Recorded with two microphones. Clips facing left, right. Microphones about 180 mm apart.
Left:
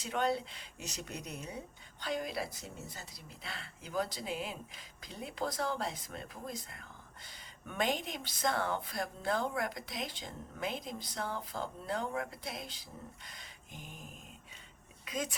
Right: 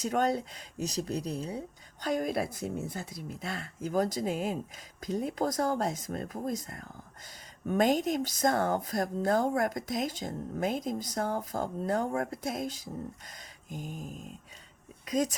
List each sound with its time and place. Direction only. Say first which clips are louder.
0.0 s speech: right 5 dB; 45° right (ahead or behind)